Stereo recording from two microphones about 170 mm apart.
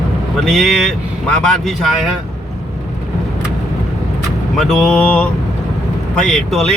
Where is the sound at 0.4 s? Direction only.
Centre (ahead or behind).